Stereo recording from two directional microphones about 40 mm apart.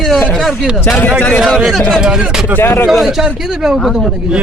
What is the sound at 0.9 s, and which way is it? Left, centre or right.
Speech, left.